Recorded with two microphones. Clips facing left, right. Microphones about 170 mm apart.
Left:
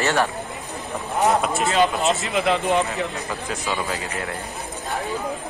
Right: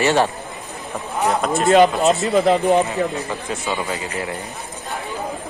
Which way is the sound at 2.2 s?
40° right (ahead or behind).